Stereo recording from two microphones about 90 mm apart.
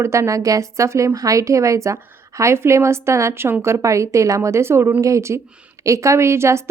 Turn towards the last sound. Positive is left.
turn(degrees=-30)  # may be behind; listen again after turning